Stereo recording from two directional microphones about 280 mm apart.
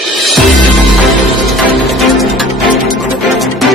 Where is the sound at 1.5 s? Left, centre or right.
Centre.